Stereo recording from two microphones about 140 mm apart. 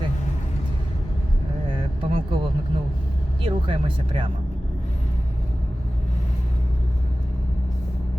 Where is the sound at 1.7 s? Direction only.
35° right (ahead or behind).